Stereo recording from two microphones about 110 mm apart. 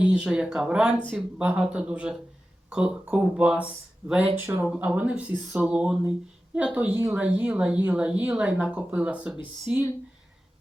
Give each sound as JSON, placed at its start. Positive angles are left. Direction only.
{"t": 0.0, "sound": "speech", "side_deg": -10}